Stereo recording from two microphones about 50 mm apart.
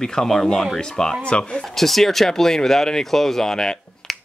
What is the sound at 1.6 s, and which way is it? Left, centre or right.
Speech, centre.